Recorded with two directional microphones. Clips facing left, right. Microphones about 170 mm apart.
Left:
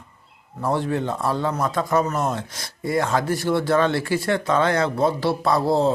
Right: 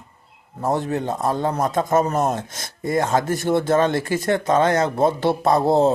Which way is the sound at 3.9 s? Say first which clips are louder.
Right 1 dB; 45° right (ahead or behind).